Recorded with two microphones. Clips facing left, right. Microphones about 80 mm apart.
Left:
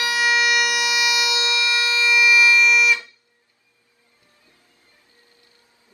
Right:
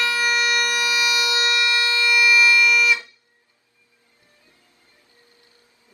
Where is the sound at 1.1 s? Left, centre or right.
Right.